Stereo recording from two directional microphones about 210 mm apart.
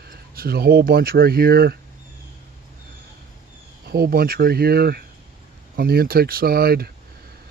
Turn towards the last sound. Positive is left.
turn(degrees=-45)  # may be behind; listen again after turning